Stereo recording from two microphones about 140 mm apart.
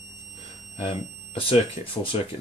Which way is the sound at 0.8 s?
40° left (ahead or behind).